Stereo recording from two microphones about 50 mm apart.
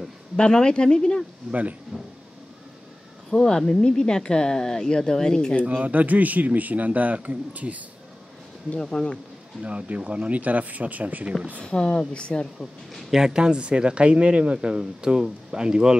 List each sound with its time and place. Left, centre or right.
0.4 s speech: centre
1.5 s a man's voice: right
3.3 s speech: centre
5.7 s a man's voice: right
8.8 s speech: centre
9.6 s a man's voice: right
11.6 s speech: centre
12.9 s speech: centre